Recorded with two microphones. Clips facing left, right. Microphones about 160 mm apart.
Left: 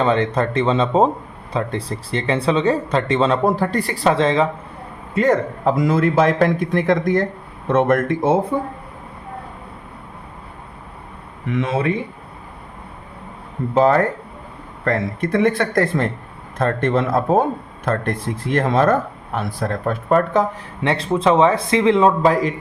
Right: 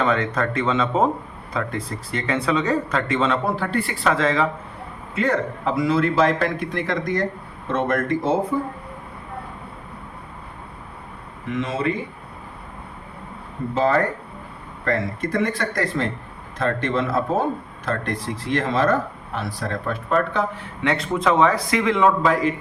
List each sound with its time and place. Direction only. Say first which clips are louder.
0.0 s speech: left 4 dB; 30° left (ahead or behind)
5.1 s speech: left 5 dB; 45° left (ahead or behind)
11.5 s speech: left 4 dB; 60° left (ahead or behind)
14.8 s speech: left 3 dB; 55° left (ahead or behind)
20.8 s speech: left 3 dB; 30° left (ahead or behind)